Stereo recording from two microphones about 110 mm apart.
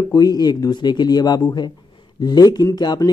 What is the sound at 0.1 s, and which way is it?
Speech, 35° left (ahead or behind).